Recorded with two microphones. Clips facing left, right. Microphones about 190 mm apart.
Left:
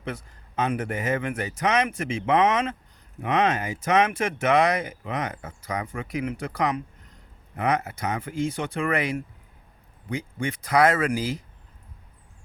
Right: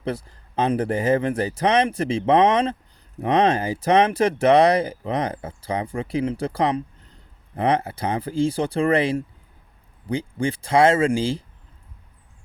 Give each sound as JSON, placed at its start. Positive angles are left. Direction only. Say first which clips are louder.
{"t": 0.0, "sound": "speech", "louder": "right 6 dB", "side_deg": -35}